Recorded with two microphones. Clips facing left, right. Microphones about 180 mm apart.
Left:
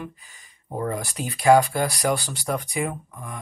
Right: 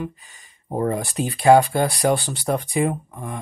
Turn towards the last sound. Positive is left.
turn(degrees=-30)  # may be behind; listen again after turning